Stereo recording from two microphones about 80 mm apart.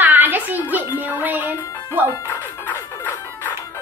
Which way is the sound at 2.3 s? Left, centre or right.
Left.